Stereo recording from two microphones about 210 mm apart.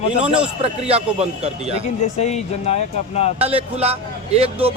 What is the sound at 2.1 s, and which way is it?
Speech, 30° left (ahead or behind).